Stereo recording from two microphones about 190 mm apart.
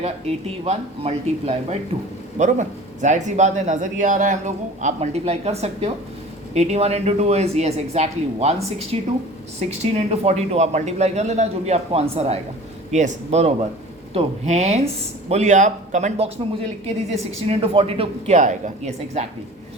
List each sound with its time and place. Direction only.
0.0 s speech: 30° right (ahead or behind)